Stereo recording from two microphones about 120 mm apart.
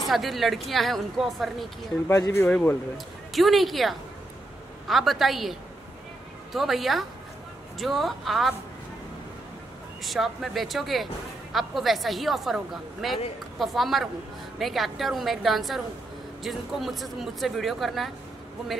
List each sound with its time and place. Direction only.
0.1 s speech: centre (ahead or behind)
2.0 s speech: 25° left (ahead or behind)
3.3 s speech: centre (ahead or behind)
10.0 s speech: centre (ahead or behind)